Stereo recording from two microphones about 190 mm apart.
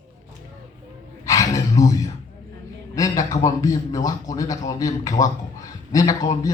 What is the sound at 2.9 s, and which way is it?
A man's voice, 15° left (ahead or behind).